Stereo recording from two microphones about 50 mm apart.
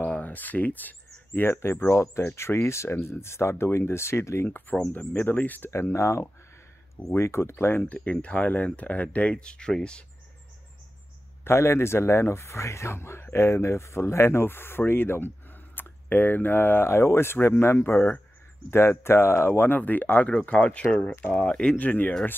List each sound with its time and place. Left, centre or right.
0.0 s speech: left
4.5 s speech: left
5.7 s speech: left
7.2 s speech: left
7.8 s speech: left
11.4 s speech: left
19.8 s speech: left
20.2 s speech: left
21.0 s speech: left
21.3 s speech: left